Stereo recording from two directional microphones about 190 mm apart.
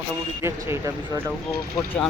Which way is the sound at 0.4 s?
15° right (ahead or behind).